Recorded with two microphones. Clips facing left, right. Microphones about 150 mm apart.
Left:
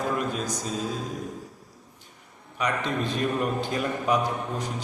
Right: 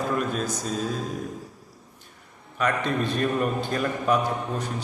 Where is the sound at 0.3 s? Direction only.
15° left (ahead or behind).